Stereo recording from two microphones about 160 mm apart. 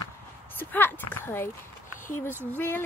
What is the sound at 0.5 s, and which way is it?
Speech, 10° left (ahead or behind).